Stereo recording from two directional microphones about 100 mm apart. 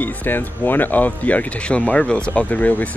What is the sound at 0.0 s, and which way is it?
Speech, 20° left (ahead or behind).